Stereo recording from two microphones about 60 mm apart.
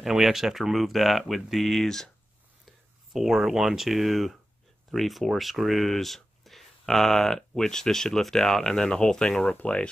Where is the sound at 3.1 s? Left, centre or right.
Centre.